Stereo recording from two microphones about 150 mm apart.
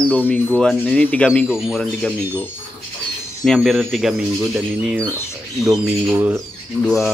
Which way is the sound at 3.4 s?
Centre (ahead or behind).